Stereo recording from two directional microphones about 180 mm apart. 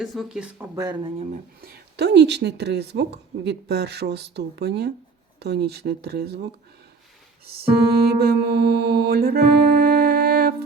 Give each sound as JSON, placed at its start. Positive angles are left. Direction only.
{"t": 0.0, "sound": "speech", "side_deg": 0}
{"t": 0.8, "sound": "speech", "side_deg": -25}
{"t": 1.6, "sound": "speech", "side_deg": -65}
{"t": 5.4, "sound": "music", "side_deg": -65}
{"t": 8.0, "sound": "music", "side_deg": -60}